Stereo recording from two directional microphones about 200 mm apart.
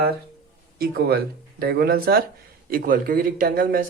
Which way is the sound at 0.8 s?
50° right (ahead or behind).